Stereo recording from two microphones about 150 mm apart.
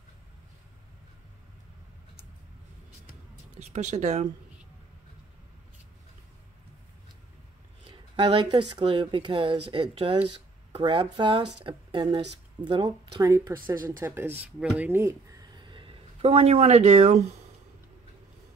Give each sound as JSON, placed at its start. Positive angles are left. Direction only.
{"t": 3.5, "sound": "speech", "side_deg": -50}
{"t": 7.8, "sound": "speech", "side_deg": -35}